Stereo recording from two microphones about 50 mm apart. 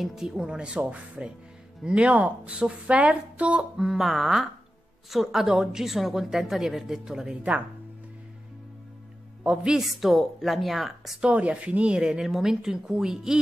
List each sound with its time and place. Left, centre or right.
0.0 s a woman's voice: centre; by 3.6 s right
3.7 s a woman's voice: centre
9.4 s a man's voice: centre
9.8 s a woman's voice: centre
11.1 s a woman's voice: right